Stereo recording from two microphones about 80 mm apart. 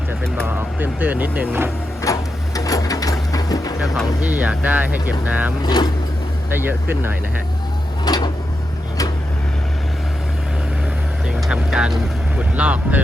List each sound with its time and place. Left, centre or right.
0.4 s speech: right
2.1 s printer: left
2.6 s sewing machine: left
4.2 s speech: centre
5.6 s speech: left
6.5 s speech: right
8.0 s a sound: left
11.3 s vehicle: centre
12.4 s speech: centre